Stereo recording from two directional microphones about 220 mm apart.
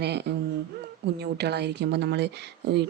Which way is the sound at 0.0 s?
50° right (ahead or behind).